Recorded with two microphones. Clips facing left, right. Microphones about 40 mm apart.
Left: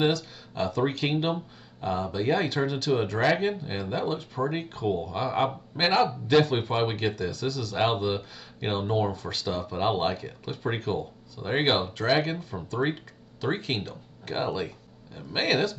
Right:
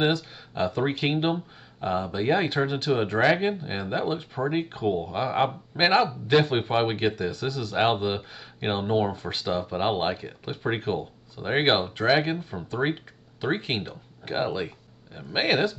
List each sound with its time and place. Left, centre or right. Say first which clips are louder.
0.0 s speech: right 1 dB; right